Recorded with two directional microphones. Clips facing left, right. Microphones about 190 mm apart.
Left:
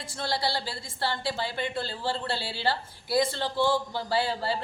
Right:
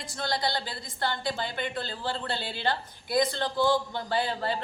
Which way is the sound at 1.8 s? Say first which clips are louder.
Left 2 dB; 30° left (ahead or behind).